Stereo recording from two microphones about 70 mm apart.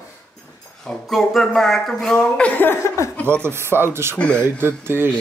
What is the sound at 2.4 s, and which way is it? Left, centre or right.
Speech, left.